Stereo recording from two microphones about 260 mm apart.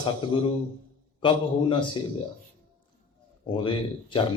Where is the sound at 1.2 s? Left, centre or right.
Centre.